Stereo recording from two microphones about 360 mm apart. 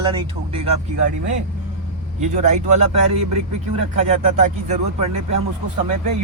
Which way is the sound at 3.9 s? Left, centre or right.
Centre.